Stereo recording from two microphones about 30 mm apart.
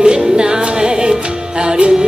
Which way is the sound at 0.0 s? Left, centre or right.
Right.